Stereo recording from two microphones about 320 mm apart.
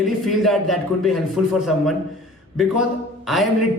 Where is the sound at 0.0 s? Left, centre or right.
Centre.